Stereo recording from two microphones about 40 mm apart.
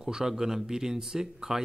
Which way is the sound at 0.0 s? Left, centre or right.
Centre.